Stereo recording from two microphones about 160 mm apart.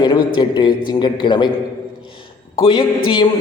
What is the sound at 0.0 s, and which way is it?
A man's voice, 25° left (ahead or behind).